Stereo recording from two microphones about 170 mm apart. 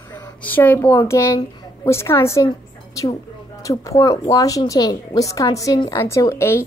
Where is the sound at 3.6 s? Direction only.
20° left (ahead or behind).